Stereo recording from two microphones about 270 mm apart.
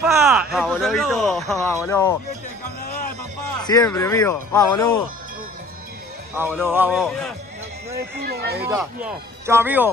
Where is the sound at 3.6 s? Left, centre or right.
Centre.